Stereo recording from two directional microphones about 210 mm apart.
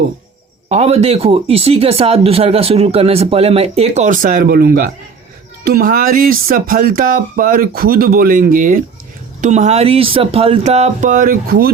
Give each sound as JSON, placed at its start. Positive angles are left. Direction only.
{"t": 0.7, "sound": "speech", "side_deg": -30}